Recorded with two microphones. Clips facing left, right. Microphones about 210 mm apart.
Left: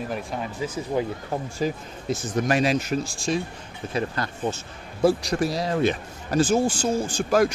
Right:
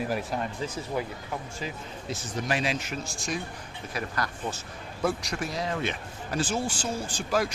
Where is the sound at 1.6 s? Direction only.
45° left (ahead or behind).